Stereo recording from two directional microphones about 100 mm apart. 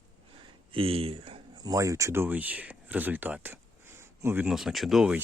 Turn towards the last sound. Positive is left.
turn(degrees=-5)  # may be behind; listen again after turning